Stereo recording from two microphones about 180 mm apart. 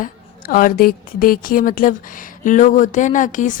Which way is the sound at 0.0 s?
50° left (ahead or behind).